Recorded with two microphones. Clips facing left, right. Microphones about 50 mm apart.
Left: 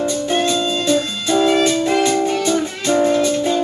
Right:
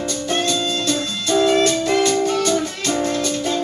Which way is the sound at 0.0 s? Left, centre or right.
Centre.